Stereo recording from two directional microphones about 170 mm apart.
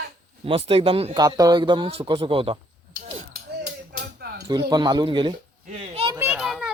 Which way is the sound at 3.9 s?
70° right (ahead or behind).